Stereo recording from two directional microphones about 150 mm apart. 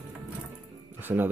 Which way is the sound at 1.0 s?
15° right (ahead or behind).